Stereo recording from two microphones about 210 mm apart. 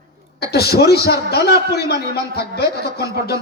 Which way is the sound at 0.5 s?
50° left (ahead or behind).